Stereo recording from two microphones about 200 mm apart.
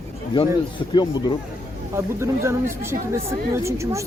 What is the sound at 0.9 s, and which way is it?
Speech, 20° left (ahead or behind).